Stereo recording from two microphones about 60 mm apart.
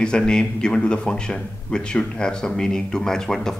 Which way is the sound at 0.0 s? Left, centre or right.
Centre.